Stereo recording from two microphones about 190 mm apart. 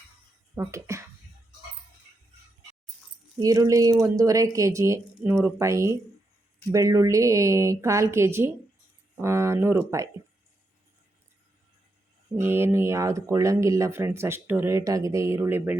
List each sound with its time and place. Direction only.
0.5 s speech: 15° right (ahead or behind)
3.4 s speech: 20° right (ahead or behind)
12.4 s speech: 10° right (ahead or behind)